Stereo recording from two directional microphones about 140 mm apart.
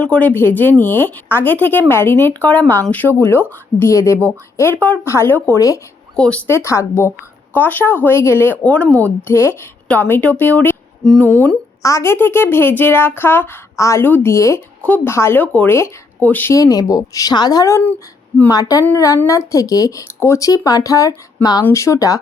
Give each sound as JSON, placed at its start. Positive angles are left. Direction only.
{"t": 0.0, "sound": "speech", "side_deg": 10}
{"t": 6.1, "sound": "speech", "side_deg": 5}
{"t": 6.5, "sound": "speech", "side_deg": 20}
{"t": 11.8, "sound": "speech", "side_deg": 20}